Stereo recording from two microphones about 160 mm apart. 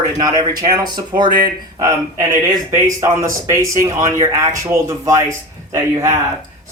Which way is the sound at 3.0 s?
20° right (ahead or behind).